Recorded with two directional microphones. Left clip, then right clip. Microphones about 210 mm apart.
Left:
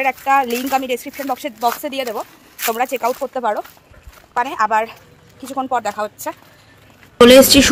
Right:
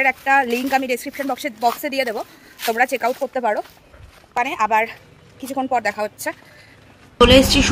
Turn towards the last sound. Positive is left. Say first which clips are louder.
# left 5 dB
turn(degrees=30)  # may be behind; listen again after turning